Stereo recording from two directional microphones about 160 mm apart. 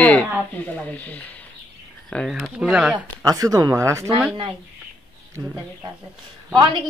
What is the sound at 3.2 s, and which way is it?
Speech, 20° right (ahead or behind).